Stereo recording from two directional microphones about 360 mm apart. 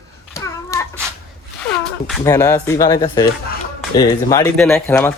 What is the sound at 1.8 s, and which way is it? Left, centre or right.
Speech, centre.